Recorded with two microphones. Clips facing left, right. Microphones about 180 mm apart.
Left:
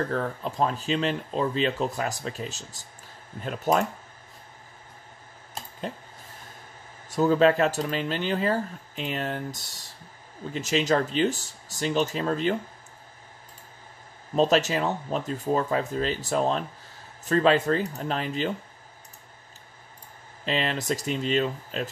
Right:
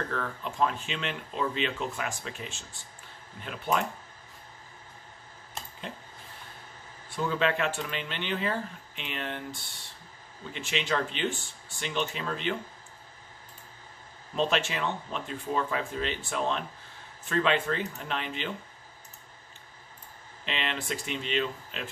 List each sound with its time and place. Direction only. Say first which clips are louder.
0.1 s speech: left 5 dB; 35° left (ahead or behind)
7.1 s speech: left 8 dB; 40° left (ahead or behind)
14.3 s speech: left 7 dB; 40° left (ahead or behind)
20.4 s speech: left 7 dB; 40° left (ahead or behind)